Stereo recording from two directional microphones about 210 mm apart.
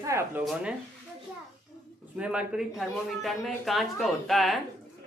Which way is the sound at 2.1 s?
5° right (ahead or behind).